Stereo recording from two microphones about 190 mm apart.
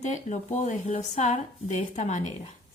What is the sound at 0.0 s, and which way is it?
Speech, 40° left (ahead or behind).